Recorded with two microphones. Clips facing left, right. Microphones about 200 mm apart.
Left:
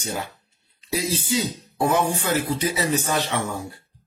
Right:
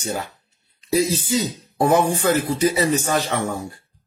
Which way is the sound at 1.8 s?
45° right (ahead or behind).